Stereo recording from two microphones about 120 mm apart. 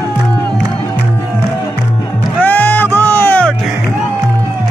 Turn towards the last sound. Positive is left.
turn(degrees=15)  # may be behind; listen again after turning